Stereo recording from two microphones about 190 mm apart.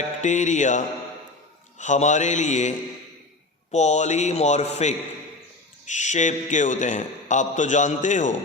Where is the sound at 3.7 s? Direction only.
35° left (ahead or behind).